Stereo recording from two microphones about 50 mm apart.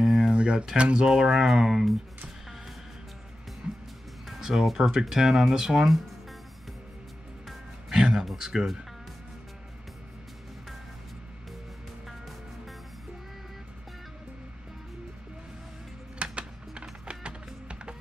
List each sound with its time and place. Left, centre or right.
0.0 s a sound: centre
0.3 s speech: centre
1.2 s speech: centre
3.6 s music: centre
4.3 s speech: centre
7.4 s music: centre
16.2 s music: right